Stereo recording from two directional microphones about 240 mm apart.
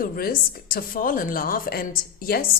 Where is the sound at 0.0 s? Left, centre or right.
Left.